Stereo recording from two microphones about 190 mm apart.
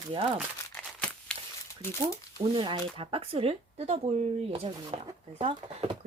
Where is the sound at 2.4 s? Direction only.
25° right (ahead or behind).